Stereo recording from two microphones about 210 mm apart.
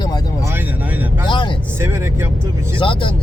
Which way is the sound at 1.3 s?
20° left (ahead or behind).